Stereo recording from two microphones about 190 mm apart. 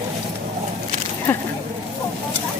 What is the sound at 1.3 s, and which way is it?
Speech, 10° left (ahead or behind).